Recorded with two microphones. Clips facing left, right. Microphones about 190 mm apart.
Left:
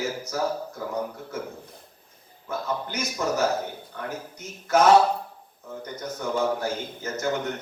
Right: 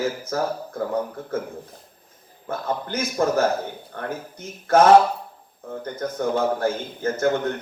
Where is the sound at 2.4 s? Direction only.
55° right (ahead or behind).